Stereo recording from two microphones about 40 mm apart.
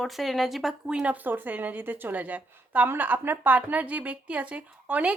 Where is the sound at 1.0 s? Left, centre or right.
Right.